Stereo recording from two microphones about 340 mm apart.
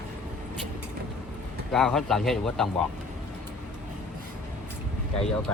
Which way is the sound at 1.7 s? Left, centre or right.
Centre.